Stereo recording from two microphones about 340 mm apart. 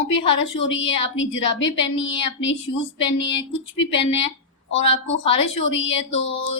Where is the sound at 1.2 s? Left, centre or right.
Left.